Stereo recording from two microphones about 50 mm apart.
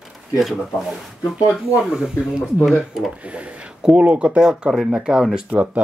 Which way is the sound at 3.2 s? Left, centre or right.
Right.